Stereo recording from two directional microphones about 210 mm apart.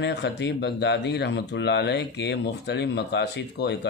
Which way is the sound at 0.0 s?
55° left (ahead or behind).